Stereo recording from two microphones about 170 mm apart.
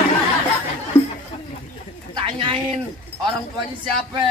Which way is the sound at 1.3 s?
35° left (ahead or behind).